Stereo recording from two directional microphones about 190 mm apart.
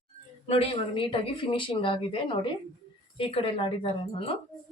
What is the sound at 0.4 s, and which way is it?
A woman's voice, 30° left (ahead or behind).